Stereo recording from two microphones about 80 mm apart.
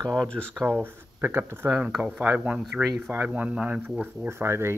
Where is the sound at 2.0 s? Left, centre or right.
Centre.